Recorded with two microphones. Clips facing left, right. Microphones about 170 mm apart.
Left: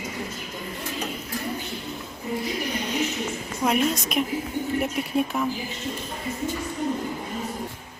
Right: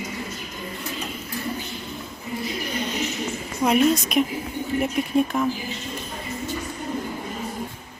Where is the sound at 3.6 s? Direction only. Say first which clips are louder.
Right 4 dB; centre (ahead or behind).